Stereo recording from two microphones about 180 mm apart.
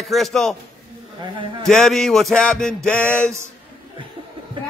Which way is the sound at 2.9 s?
5° left (ahead or behind).